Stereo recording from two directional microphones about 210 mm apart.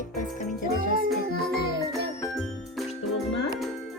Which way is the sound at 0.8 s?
45° right (ahead or behind).